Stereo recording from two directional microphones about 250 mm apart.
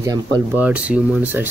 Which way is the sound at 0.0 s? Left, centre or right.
Centre.